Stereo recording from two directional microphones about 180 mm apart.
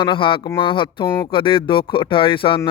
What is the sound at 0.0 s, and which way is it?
Speech, 25° left (ahead or behind).